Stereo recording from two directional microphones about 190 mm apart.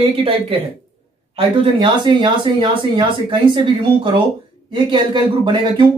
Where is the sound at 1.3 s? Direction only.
25° right (ahead or behind).